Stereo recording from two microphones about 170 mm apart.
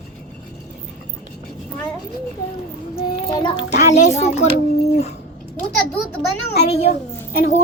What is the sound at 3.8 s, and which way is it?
Speech, 40° left (ahead or behind).